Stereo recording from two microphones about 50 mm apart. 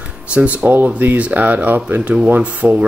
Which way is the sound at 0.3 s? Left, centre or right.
Right.